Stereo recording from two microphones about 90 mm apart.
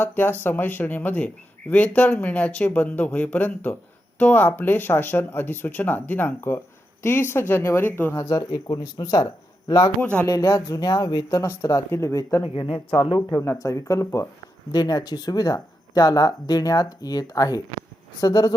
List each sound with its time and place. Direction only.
0.0 s speech: 20° left (ahead or behind)
8.1 s speech: 40° left (ahead or behind)
10.0 s speech: 20° left (ahead or behind)
10.2 s speech: 40° left (ahead or behind)
11.4 s speech: 30° left (ahead or behind)
12.4 s speech: 80° left
13.1 s speech: 30° left (ahead or behind)
14.7 s speech: 45° left (ahead or behind)